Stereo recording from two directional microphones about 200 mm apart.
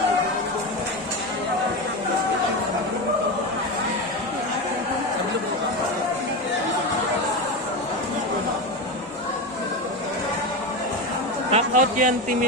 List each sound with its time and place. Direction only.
11.5 s speech: 40° right (ahead or behind)